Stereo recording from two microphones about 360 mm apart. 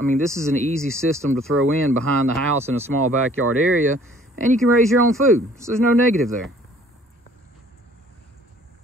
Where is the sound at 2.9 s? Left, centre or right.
Right.